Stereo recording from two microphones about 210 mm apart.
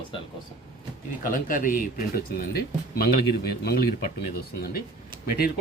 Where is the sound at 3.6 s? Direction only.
50° left (ahead or behind).